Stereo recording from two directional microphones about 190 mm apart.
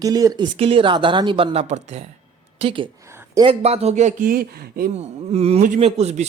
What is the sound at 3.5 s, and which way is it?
Speech, 35° right (ahead or behind).